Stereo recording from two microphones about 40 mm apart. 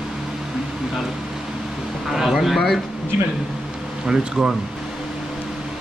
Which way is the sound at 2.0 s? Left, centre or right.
Centre.